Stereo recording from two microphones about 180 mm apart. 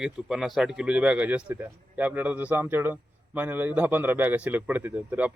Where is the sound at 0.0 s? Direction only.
Centre (ahead or behind).